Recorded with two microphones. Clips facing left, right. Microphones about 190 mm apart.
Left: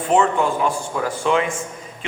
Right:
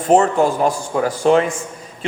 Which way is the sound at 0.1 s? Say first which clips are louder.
Right 4 dB; 40° right (ahead or behind).